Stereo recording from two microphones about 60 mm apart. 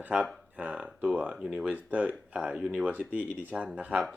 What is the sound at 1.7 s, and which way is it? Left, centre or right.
Speech, right.